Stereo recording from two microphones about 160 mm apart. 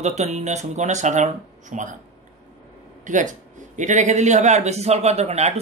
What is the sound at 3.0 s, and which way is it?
Speech, 50° right (ahead or behind).